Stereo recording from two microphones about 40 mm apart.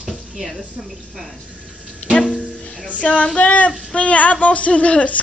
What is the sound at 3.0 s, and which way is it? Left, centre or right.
Speech, left.